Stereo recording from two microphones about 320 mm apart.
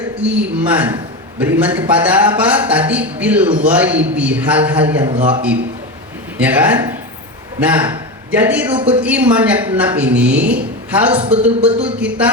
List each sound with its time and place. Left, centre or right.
0.2 s speech: centre
6.4 s a man's voice: centre
11.2 s speech: centre
11.4 s speech: centre